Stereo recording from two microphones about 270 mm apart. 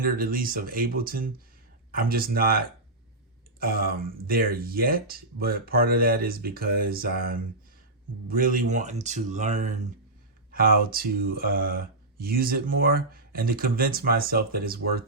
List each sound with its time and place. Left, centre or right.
0.0 s speech: right